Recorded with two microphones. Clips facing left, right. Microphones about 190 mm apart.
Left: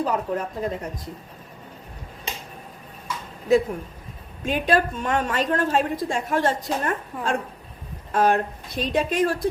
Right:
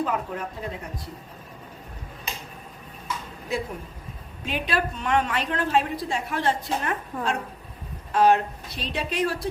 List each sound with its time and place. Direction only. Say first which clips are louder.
0.0 s speech: left 3 dB; 40° left (ahead or behind)
4.4 s a woman's voice: left 6 dB; 45° left (ahead or behind)